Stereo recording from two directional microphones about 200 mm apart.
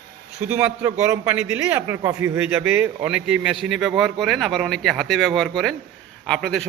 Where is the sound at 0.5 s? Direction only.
10° right (ahead or behind).